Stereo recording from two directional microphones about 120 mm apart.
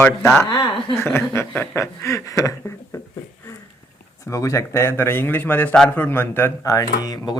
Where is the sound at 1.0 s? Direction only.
20° left (ahead or behind).